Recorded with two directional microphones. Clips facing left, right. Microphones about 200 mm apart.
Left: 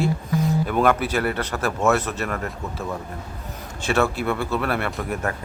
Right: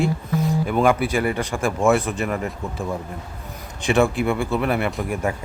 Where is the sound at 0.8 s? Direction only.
10° right (ahead or behind).